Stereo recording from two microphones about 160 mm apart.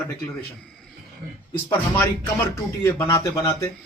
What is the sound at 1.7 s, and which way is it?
Speech, 10° left (ahead or behind).